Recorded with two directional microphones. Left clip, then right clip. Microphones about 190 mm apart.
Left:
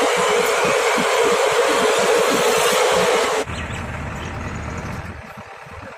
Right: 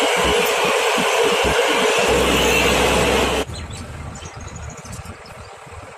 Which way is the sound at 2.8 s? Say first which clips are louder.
Left 1 dB; 25° right (ahead or behind).